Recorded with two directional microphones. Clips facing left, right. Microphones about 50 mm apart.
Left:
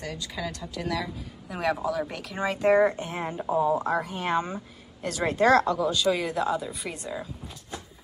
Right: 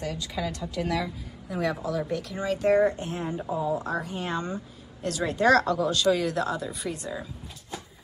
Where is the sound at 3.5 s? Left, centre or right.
Left.